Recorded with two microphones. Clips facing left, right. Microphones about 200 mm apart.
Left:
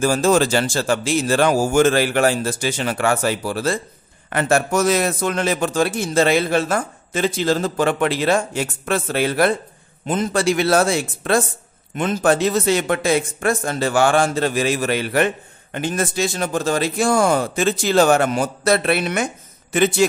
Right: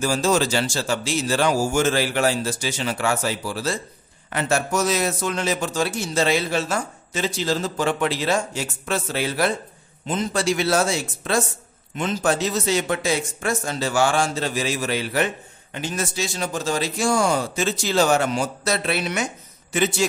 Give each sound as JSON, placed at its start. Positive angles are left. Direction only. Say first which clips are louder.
{"t": 0.0, "sound": "speech", "louder": "left 4 dB", "side_deg": 55}